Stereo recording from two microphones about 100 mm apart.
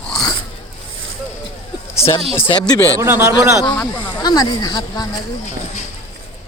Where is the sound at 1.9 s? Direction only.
75° left (ahead or behind).